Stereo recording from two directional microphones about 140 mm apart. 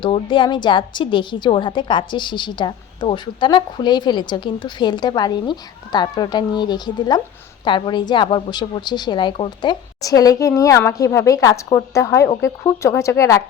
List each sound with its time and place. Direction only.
0.0 s a woman's voice: 35° left (ahead or behind)